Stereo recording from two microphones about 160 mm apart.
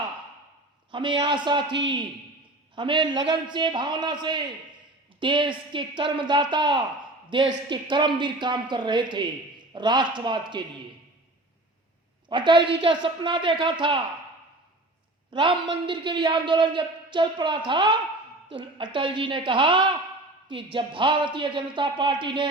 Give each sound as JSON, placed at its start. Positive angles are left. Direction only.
{"t": 0.9, "sound": "a man's voice", "side_deg": -30}
{"t": 2.7, "sound": "a woman's voice", "side_deg": -30}
{"t": 12.3, "sound": "a woman's voice", "side_deg": -30}
{"t": 15.3, "sound": "a man's voice", "side_deg": -30}
{"t": 18.9, "sound": "a man's voice", "side_deg": -30}